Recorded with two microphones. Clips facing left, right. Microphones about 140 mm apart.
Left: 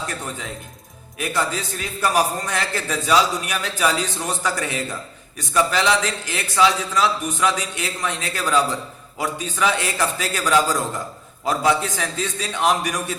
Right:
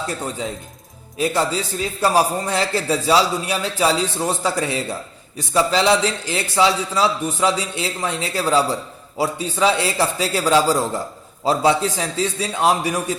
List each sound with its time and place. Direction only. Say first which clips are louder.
1.2 s a man's voice: right 4 dB; 30° right (ahead or behind)